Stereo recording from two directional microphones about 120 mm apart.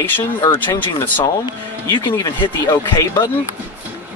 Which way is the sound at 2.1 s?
25° left (ahead or behind).